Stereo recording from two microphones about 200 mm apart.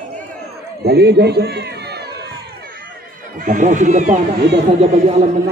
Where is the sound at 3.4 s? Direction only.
40° right (ahead or behind).